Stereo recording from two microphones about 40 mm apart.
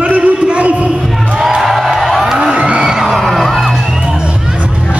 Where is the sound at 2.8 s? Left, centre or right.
Centre.